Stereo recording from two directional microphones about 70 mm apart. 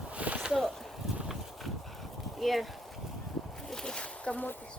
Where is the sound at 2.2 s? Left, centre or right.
Centre.